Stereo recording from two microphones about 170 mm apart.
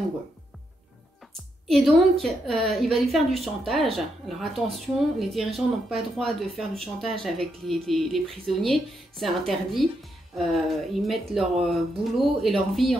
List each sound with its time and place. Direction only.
1.7 s a woman's voice: centre (ahead or behind)